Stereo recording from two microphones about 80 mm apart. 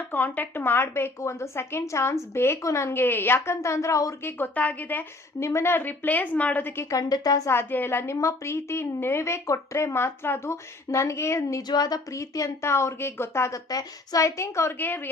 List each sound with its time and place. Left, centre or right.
0.1 s a woman's voice: left
4.2 s a woman's voice: left
5.4 s a woman's voice: left
6.9 s speech: left
7.5 s a woman's voice: left
11.7 s speech: left
12.1 s a woman's voice: left
13.7 s a woman's voice: left